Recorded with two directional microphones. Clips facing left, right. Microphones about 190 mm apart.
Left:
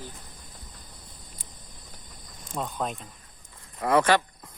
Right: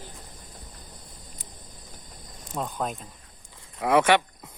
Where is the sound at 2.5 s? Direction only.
Centre (ahead or behind).